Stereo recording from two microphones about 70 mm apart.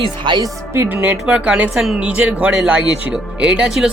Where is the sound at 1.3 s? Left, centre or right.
Centre.